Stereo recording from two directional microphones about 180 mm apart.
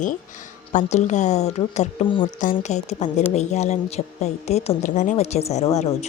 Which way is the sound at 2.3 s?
45° left (ahead or behind).